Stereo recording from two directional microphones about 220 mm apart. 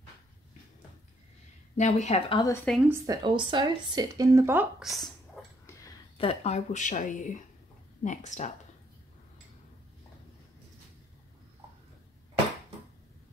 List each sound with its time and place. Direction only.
1.8 s speech: 30° left (ahead or behind)
2.5 s a woman's voice: 5° left (ahead or behind)
2.8 s speech: 15° right (ahead or behind)
6.1 s speech: 25° left (ahead or behind)